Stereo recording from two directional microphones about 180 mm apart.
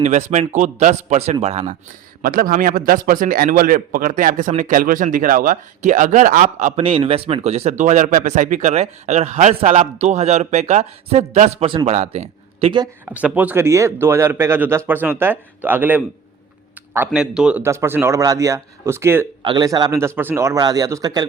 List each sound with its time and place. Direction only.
0.0 s speech: 40° right (ahead or behind)
2.2 s a man's voice: 50° right (ahead or behind); by 12.9 s 30° right (ahead or behind)
13.1 s speech: 10° right (ahead or behind)
17.1 s speech: 5° right (ahead or behind)
19.4 s a man's voice: 25° right (ahead or behind)